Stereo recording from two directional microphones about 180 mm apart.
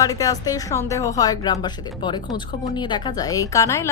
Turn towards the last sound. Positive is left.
turn(degrees=15)  # may be behind; listen again after turning